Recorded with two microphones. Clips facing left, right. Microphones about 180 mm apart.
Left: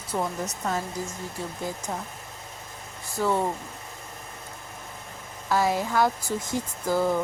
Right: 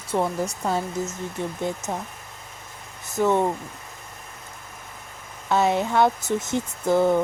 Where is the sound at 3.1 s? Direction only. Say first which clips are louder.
Right 4 dB; 20° right (ahead or behind).